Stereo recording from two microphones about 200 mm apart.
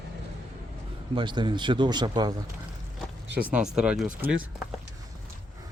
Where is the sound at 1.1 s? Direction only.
25° right (ahead or behind).